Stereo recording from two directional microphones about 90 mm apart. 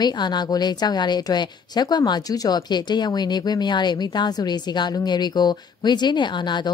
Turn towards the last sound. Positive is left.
turn(degrees=55)  # may be behind; listen again after turning